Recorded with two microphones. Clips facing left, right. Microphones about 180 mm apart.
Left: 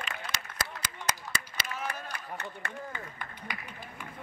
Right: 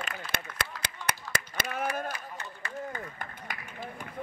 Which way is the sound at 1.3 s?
50° right (ahead or behind).